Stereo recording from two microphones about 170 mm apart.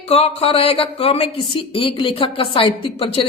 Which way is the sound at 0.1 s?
35° left (ahead or behind).